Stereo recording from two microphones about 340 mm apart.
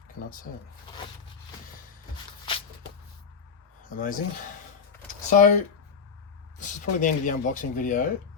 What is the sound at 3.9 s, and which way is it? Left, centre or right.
Speech, left.